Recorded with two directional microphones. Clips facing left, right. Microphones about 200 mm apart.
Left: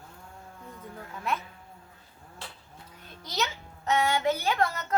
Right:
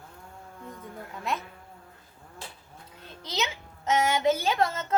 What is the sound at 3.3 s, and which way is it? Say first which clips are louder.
A woman's voice: even; 20° right (ahead or behind).